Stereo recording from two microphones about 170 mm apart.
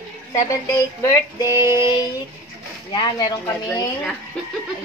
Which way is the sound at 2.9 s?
25° left (ahead or behind).